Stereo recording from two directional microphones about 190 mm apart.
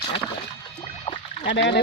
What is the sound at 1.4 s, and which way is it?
Speech, 65° left (ahead or behind).